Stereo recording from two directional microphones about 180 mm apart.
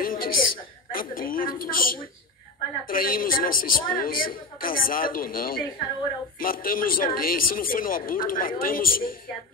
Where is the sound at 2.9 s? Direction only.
50° left (ahead or behind).